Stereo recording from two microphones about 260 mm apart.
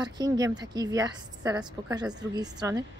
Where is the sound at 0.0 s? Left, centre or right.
Centre.